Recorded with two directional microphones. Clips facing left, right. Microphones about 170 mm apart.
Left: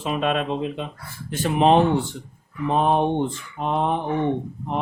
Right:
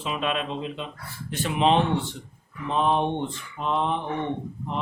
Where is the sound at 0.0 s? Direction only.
45° left (ahead or behind).